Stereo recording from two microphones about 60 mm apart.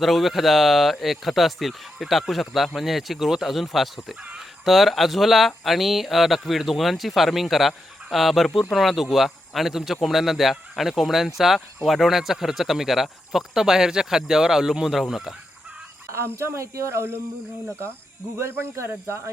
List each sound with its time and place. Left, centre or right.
0.0 s speech: centre
16.1 s speech: right
18.8 s speech: right